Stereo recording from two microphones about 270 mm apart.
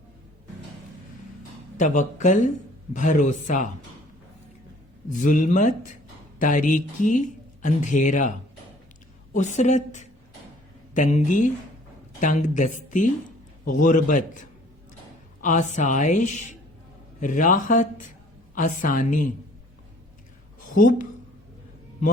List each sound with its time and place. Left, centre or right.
1.8 s speech: left
5.1 s speech: left
9.3 s speech: left
15.4 s speech: left
20.7 s speech: left